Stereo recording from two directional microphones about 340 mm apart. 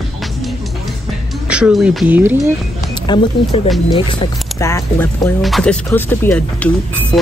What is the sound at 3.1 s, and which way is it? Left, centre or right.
Speech, centre.